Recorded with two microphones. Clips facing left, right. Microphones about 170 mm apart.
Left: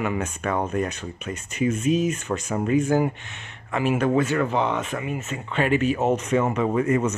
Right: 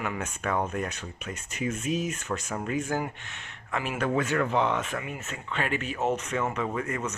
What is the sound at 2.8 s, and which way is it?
Speech, 15° left (ahead or behind).